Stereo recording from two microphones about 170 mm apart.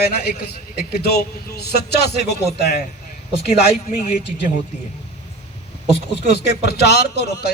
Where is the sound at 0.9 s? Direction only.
70° left (ahead or behind).